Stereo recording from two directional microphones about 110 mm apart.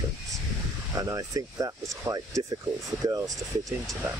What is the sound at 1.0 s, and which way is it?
Speech, 30° right (ahead or behind).